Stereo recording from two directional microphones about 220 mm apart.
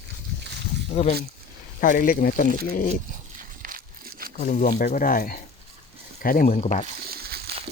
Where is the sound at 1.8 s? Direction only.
40° left (ahead or behind).